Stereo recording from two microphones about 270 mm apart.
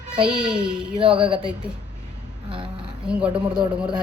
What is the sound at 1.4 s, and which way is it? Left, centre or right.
A woman's voice, centre.